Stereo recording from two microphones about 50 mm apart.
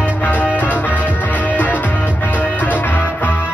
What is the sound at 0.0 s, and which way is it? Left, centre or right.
Music, left.